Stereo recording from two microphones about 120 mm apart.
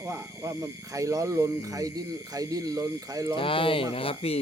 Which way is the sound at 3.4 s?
45° left (ahead or behind).